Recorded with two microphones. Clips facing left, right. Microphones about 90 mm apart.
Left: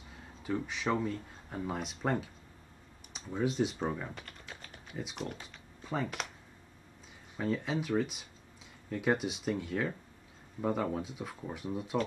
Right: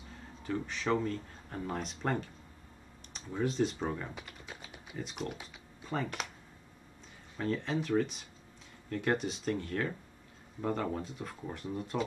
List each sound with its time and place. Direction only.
0.4 s speech: 5° left (ahead or behind)
4.2 s typing: 10° right (ahead or behind)
4.9 s speech: centre (ahead or behind)
7.3 s speech: 5° left (ahead or behind)